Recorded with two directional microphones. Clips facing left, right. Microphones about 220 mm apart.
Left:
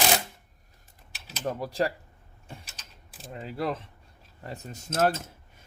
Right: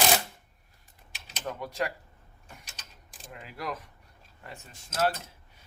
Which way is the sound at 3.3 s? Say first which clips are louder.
Left 6 dB; 30° left (ahead or behind).